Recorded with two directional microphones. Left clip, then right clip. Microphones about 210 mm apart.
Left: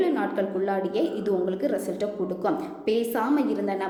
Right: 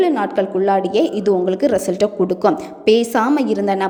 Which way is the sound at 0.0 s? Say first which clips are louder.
Right 8 dB; 35° right (ahead or behind).